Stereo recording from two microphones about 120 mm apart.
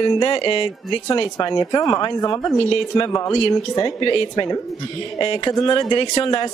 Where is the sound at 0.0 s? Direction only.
45° left (ahead or behind).